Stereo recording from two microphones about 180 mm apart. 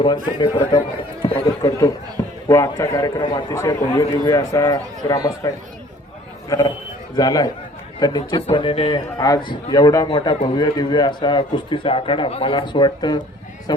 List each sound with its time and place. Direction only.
0.0 s a man's voice: 25° left (ahead or behind)
6.5 s a man's voice: 15° left (ahead or behind)
9.1 s a man's voice: 20° left (ahead or behind)